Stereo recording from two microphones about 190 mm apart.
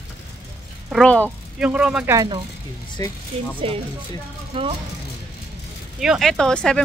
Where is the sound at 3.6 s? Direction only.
30° right (ahead or behind).